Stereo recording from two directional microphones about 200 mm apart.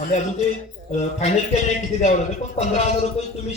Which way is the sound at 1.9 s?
35° left (ahead or behind).